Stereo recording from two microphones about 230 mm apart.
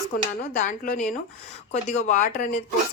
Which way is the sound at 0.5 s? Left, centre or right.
Left.